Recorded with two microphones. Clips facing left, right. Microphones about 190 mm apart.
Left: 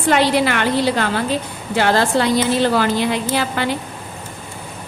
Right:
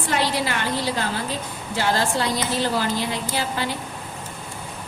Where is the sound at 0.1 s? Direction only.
70° left (ahead or behind).